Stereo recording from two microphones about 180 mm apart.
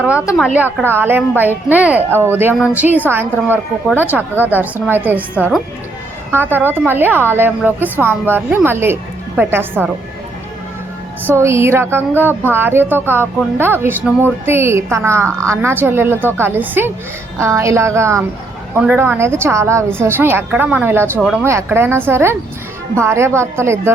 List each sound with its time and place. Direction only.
0.0 s a woman's voice: 5° right (ahead or behind)
5.4 s speech: centre (ahead or behind)
6.3 s a woman's voice: 10° right (ahead or behind)
11.3 s a woman's voice: 15° right (ahead or behind)